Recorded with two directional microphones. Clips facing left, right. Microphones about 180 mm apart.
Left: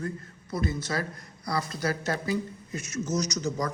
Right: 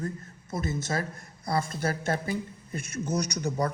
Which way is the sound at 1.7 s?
50° right (ahead or behind).